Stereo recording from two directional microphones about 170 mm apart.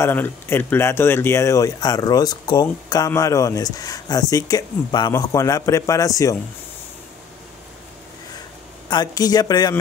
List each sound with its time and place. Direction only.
0.0 s speech: 10° left (ahead or behind)
8.8 s speech: 25° left (ahead or behind)